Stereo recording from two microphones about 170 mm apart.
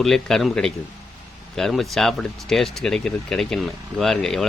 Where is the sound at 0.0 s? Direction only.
5° left (ahead or behind).